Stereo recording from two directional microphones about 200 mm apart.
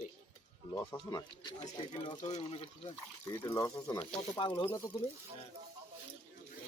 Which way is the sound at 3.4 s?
15° left (ahead or behind).